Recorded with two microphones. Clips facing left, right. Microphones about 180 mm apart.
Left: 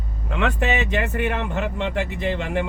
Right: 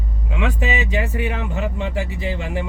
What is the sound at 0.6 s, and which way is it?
Speech, 65° left (ahead or behind).